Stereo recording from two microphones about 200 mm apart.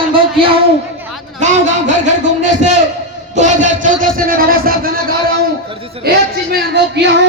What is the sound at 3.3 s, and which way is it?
A man's voice, 35° right (ahead or behind).